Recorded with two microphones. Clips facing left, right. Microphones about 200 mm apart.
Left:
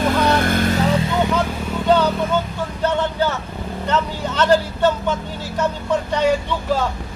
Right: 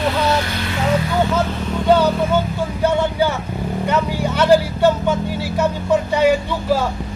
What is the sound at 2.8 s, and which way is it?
Speech, 10° right (ahead or behind).